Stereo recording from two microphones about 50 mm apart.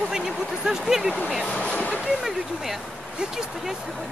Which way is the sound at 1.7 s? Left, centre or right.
Left.